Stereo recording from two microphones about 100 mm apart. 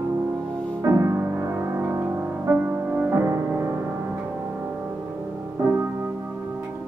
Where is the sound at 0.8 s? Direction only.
25° right (ahead or behind).